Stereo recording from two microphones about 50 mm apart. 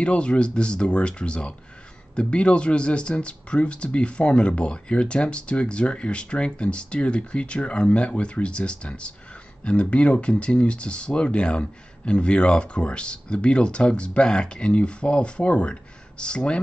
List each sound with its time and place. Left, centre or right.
0.0 s speech: left